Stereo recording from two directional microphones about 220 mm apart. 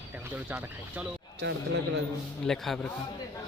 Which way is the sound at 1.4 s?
50° right (ahead or behind).